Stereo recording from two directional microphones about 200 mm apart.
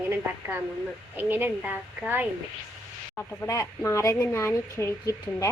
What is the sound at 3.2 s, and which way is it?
A woman's voice, 15° left (ahead or behind).